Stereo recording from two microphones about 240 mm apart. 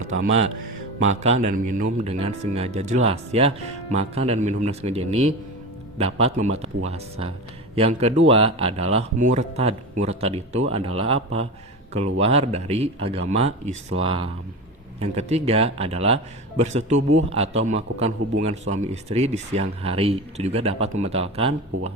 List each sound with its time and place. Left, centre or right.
1.0 s a man's voice: right